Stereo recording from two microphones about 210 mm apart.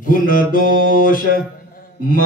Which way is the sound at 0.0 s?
40° left (ahead or behind).